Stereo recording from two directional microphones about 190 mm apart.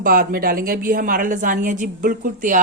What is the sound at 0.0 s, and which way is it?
A woman's voice, 50° right (ahead or behind).